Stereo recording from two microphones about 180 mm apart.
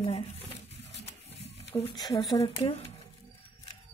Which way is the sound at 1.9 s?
20° left (ahead or behind).